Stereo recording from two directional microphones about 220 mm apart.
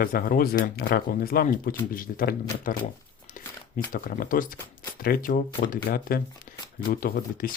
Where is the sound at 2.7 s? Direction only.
35° left (ahead or behind).